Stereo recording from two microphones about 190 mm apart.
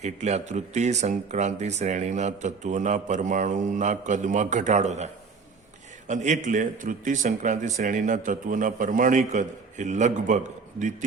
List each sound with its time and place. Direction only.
0.0 s speech: 35° right (ahead or behind)
6.1 s a man's voice: 40° right (ahead or behind)